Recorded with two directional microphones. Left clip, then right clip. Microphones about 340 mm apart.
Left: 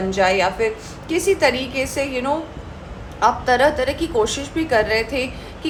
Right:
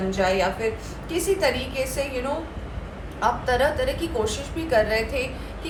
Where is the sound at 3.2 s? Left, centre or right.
Left.